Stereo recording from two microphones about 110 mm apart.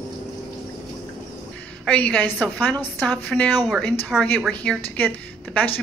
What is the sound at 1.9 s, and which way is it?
A woman's voice, 10° left (ahead or behind).